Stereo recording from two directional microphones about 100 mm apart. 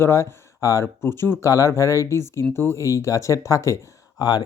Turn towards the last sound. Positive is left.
turn(degrees=40)  # may be behind; listen again after turning